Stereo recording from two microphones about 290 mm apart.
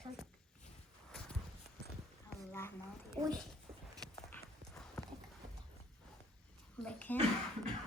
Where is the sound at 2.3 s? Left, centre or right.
Centre.